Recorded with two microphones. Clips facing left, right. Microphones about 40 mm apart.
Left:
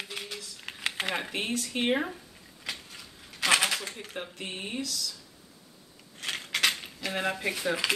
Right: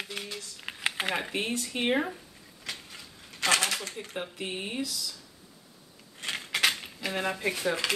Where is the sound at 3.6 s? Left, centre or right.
Centre.